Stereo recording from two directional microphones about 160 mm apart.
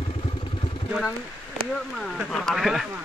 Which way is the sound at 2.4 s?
Centre (ahead or behind).